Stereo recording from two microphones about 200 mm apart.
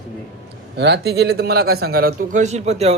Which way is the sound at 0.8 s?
55° right (ahead or behind).